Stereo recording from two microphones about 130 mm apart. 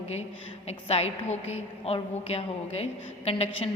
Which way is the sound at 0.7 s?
50° left (ahead or behind).